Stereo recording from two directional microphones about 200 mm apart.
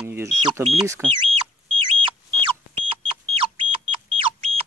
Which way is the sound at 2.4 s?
25° right (ahead or behind).